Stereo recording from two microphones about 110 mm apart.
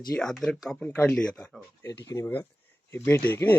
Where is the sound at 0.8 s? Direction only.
15° left (ahead or behind).